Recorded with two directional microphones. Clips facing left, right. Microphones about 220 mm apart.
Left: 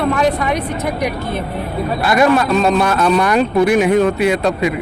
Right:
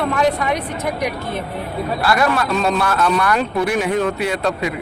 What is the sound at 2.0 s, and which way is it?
A man's voice, 20° left (ahead or behind).